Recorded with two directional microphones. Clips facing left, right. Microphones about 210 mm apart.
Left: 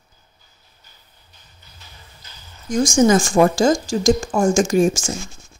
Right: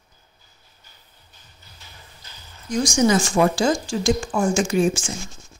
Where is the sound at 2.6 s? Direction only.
50° left (ahead or behind).